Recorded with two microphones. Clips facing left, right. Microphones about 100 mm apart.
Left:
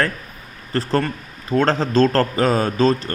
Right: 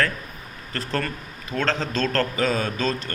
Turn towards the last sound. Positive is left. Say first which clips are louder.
# left 8 dB
turn(degrees=35)  # may be behind; listen again after turning